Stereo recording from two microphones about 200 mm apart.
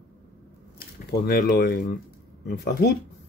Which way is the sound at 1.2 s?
50° left (ahead or behind).